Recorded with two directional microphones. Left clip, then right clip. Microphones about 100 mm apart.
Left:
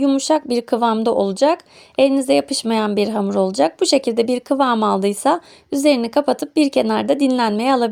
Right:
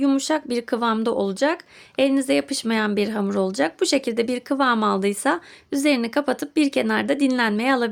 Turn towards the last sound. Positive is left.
turn(degrees=25)  # may be behind; listen again after turning